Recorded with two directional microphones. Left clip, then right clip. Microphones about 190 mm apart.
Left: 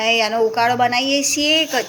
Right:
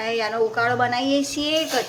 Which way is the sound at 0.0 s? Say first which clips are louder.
Left 6 dB; 15° left (ahead or behind).